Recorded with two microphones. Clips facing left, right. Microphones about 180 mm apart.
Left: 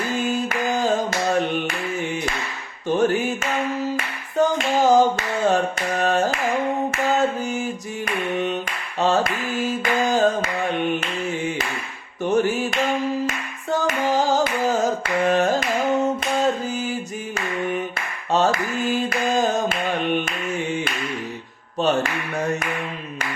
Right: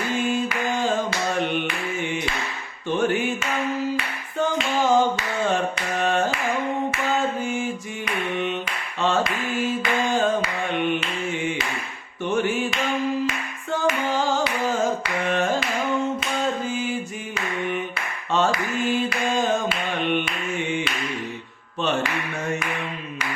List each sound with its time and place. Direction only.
0.1 s clapping: 40° left (ahead or behind)
2.9 s music: 40° left (ahead or behind)
3.9 s a sound: 40° left (ahead or behind)
7.2 s music: 40° left (ahead or behind)
9.0 s a sound: 40° left (ahead or behind)
12.2 s music: 40° left (ahead or behind)
13.2 s singing: 40° left (ahead or behind)
16.4 s music: 40° left (ahead or behind)
18.3 s a sound: 40° left (ahead or behind)
19.4 s music: 40° left (ahead or behind)
21.8 s clapping: 40° left (ahead or behind)